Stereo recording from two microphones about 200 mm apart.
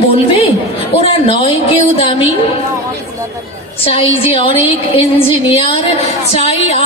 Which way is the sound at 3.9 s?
30° left (ahead or behind).